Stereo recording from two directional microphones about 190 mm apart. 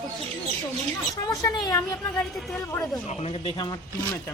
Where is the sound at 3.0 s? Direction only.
30° left (ahead or behind).